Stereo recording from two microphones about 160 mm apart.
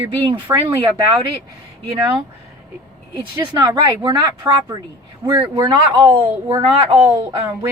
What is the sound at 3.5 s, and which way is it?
Speech, 25° right (ahead or behind).